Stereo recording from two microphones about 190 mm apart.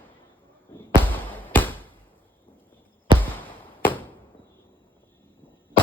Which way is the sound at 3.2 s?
10° left (ahead or behind).